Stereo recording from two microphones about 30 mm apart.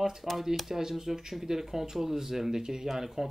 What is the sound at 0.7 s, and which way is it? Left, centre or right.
Speech, centre.